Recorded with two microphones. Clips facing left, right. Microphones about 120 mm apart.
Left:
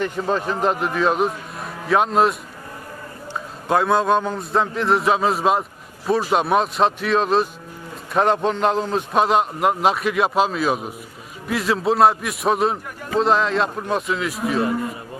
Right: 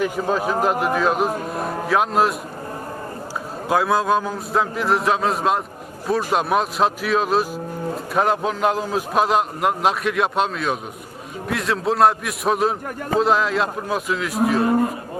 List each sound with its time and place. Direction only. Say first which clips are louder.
0.0 s a man's voice: right 1 dB; 5° right (ahead or behind)
3.7 s a man's voice: left 1 dB; centre (ahead or behind)
14.7 s a man's voice: right 5 dB; 50° right (ahead or behind)